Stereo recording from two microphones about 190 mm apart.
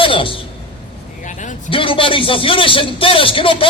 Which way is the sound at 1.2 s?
40° left (ahead or behind).